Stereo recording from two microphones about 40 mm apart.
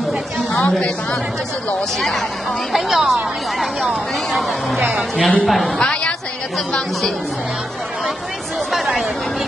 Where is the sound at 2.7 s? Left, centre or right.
Centre.